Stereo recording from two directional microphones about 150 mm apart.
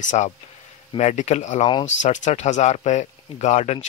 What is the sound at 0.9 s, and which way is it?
Speech, 50° left (ahead or behind).